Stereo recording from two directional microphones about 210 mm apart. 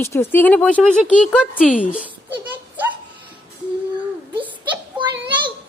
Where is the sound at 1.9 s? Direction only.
10° right (ahead or behind).